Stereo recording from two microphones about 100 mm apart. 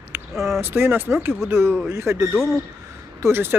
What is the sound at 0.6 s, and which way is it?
Speech, 25° right (ahead or behind).